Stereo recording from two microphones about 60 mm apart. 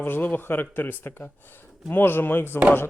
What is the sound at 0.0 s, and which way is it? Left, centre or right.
Speech, left.